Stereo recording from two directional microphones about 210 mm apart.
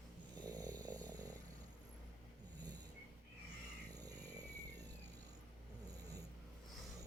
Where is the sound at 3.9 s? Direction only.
20° right (ahead or behind).